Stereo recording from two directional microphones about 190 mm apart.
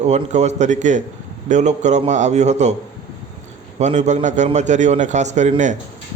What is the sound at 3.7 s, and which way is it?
Speech, 35° right (ahead or behind).